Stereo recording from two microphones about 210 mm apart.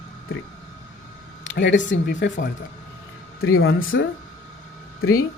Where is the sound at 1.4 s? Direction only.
60° left (ahead or behind).